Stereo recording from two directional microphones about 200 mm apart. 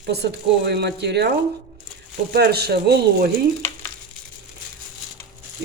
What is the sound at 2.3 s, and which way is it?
Speech, 55° right (ahead or behind).